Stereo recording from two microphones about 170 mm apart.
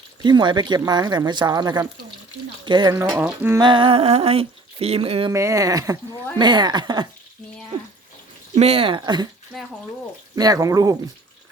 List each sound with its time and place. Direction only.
0.2 s speech: 25° right (ahead or behind)
3.1 s speech: 10° right (ahead or behind)
3.6 s speech: 30° right (ahead or behind)
5.3 s speech: 15° right (ahead or behind)
8.5 s speech: 35° right (ahead or behind)
9.5 s speech: centre (ahead or behind)
10.3 s speech: 20° right (ahead or behind)